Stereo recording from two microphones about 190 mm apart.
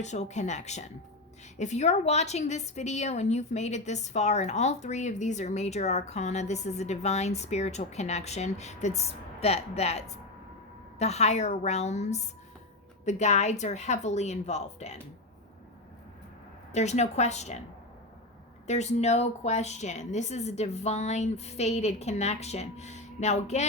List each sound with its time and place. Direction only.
0.0 s a woman's voice: 35° left (ahead or behind)
16.7 s a woman's voice: 35° left (ahead or behind)
18.7 s a woman's voice: 35° left (ahead or behind)